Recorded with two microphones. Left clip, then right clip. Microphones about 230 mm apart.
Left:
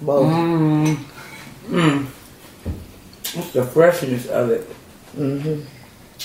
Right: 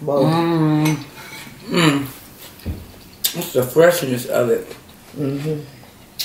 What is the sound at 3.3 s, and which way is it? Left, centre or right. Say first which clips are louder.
Speech: right 1 dB; centre.